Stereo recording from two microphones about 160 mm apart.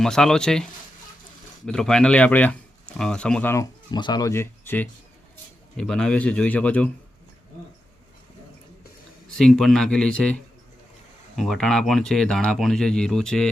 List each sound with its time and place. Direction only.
0.0 s speech: 5° left (ahead or behind)
3.5 s speech: 25° left (ahead or behind); by 6.9 s 10° left (ahead or behind)
9.3 s speech: 5° left (ahead or behind)